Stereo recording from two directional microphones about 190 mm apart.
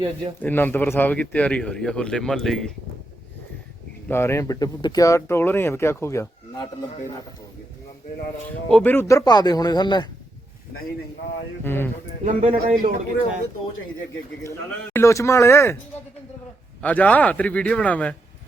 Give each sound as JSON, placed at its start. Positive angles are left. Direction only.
{"t": 0.4, "sound": "speech", "side_deg": 10}
{"t": 4.1, "sound": "speech", "side_deg": 15}
{"t": 8.4, "sound": "speech", "side_deg": 10}
{"t": 11.6, "sound": "speech", "side_deg": 10}
{"t": 12.2, "sound": "speech", "side_deg": -40}
{"t": 14.9, "sound": "speech", "side_deg": 15}
{"t": 16.8, "sound": "speech", "side_deg": 10}